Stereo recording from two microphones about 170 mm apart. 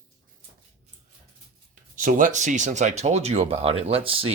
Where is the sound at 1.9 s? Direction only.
50° right (ahead or behind).